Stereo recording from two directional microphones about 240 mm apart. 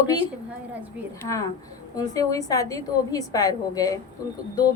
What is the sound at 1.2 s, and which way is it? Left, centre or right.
A woman's voice, centre.